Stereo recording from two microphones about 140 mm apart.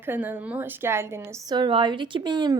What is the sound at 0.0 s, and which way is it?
A woman's voice, 15° right (ahead or behind).